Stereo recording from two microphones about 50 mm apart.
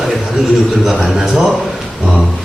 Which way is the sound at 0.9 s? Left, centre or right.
Centre.